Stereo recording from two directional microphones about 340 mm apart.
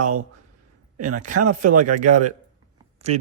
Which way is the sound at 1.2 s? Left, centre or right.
Right.